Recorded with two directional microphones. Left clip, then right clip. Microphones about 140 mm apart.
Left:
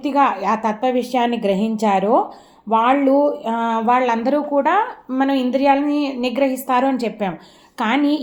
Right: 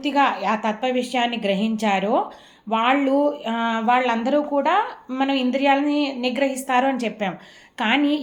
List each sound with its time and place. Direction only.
0.0 s speech: 55° left (ahead or behind)